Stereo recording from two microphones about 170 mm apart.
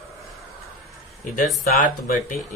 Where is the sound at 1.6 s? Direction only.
60° left (ahead or behind).